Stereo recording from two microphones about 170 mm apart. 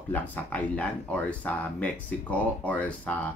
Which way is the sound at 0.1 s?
10° left (ahead or behind).